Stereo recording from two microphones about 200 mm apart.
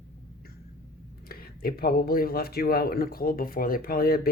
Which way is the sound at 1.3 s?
50° left (ahead or behind).